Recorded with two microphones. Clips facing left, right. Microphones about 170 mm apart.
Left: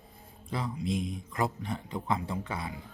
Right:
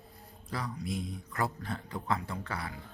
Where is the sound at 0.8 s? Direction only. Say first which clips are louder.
Left 5 dB; 20° left (ahead or behind).